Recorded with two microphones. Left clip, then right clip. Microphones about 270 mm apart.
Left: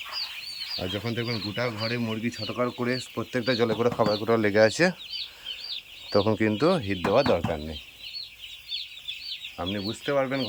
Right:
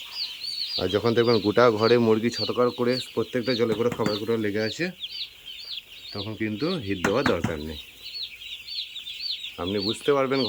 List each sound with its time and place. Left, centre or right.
0.8 s speech: centre
2.4 s speech: centre
6.4 s speech: centre
9.6 s speech: centre